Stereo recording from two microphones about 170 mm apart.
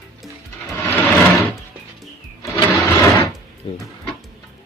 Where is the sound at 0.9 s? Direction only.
10° left (ahead or behind).